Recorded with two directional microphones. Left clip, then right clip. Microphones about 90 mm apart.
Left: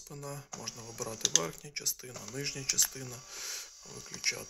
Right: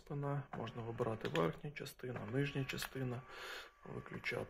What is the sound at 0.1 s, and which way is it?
Speech, 30° right (ahead or behind).